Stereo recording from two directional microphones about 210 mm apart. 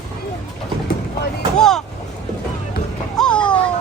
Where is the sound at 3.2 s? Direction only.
5° left (ahead or behind).